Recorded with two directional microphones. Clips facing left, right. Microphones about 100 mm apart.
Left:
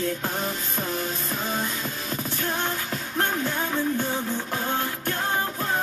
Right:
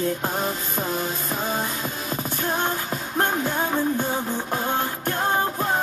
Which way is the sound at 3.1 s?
25° right (ahead or behind).